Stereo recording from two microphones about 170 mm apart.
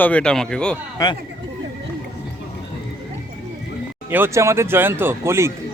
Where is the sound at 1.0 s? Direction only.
20° left (ahead or behind).